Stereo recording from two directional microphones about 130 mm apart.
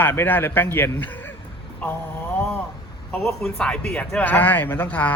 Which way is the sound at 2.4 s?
15° left (ahead or behind).